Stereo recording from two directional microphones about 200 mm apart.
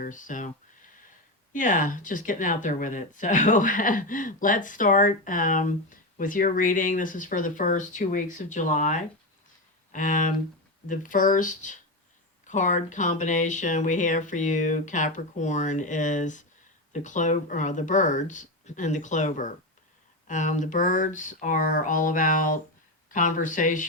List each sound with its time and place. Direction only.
0.0 s speech: 40° left (ahead or behind)
1.5 s speech: 40° left (ahead or behind)